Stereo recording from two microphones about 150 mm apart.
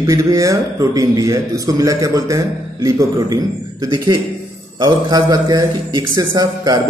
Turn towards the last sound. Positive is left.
turn(degrees=-25)  # may be behind; listen again after turning